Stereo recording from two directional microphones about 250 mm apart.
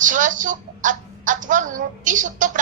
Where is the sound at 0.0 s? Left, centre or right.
Right.